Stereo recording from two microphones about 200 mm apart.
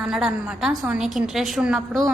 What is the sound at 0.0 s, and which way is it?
A woman's voice, 5° right (ahead or behind).